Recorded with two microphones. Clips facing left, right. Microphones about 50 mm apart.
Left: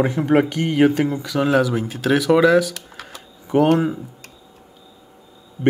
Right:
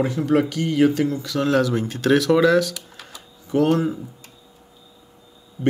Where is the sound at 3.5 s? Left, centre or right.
Left.